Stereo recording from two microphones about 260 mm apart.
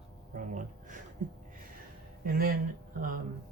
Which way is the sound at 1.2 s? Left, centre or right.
Right.